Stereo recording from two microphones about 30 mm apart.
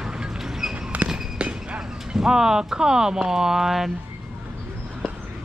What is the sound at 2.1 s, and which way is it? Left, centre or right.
Speech, centre.